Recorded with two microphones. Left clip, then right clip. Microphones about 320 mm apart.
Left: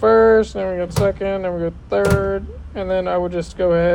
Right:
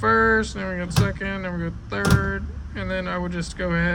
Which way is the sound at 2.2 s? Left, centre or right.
Left.